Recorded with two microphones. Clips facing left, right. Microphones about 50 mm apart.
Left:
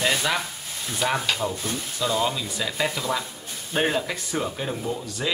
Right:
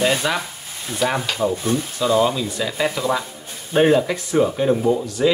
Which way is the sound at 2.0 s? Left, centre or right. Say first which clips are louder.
Right 6 dB; centre.